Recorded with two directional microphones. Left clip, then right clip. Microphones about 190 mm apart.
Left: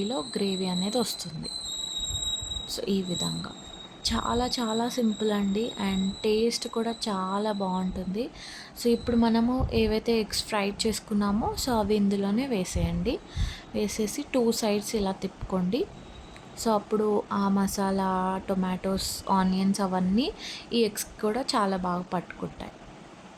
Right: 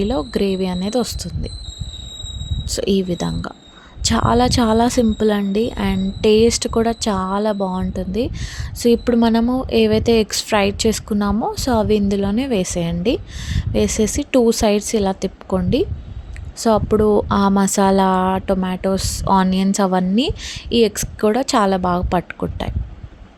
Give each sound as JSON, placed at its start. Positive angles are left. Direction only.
{"t": 0.0, "sound": "a woman's voice", "side_deg": -35}
{"t": 2.6, "sound": "a woman's voice", "side_deg": -35}